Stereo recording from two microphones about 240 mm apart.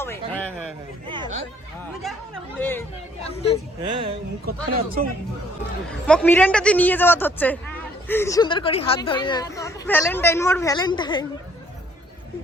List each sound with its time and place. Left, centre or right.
0.0 s a sound: centre
1.0 s speech: centre
2.6 s a woman's voice: centre
3.2 s speech: left
3.8 s speech: right
4.4 s speech: right
5.9 s a woman's voice: centre